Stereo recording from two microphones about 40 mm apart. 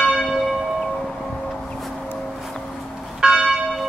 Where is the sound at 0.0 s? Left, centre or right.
Centre.